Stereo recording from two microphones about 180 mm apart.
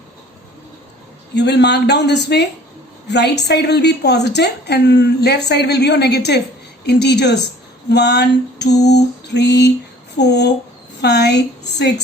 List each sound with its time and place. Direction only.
1.3 s a woman's voice: 70° left (ahead or behind)